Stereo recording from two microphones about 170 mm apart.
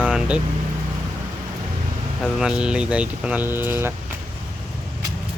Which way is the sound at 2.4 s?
5° right (ahead or behind).